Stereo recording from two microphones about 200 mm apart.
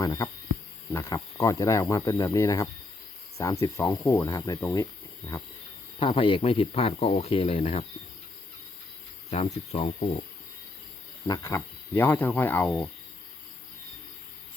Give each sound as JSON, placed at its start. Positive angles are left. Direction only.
{"t": 0.0, "sound": "a sound", "side_deg": 20}
{"t": 0.9, "sound": "speech", "side_deg": 15}
{"t": 6.0, "sound": "speech", "side_deg": 25}
{"t": 9.3, "sound": "speech", "side_deg": 30}
{"t": 11.3, "sound": "speech", "side_deg": 15}